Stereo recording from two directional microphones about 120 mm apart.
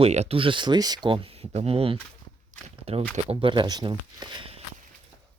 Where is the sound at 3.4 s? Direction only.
40° right (ahead or behind).